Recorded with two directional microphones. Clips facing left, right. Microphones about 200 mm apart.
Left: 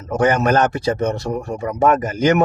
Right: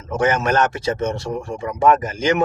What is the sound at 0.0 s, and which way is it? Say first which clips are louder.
Speech: left 3 dB; 40° left (ahead or behind).